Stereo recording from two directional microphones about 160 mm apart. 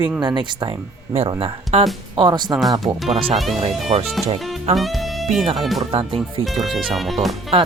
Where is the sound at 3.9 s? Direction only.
35° right (ahead or behind).